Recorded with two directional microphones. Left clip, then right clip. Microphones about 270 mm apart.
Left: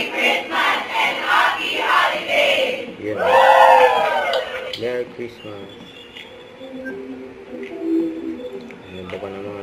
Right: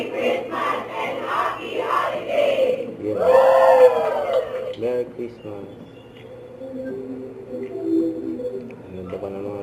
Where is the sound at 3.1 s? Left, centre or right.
Centre.